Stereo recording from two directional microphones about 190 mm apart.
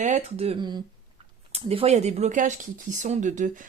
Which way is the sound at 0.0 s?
35° right (ahead or behind).